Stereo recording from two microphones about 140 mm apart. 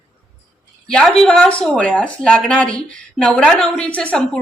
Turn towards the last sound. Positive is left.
turn(degrees=5)  # may be behind; listen again after turning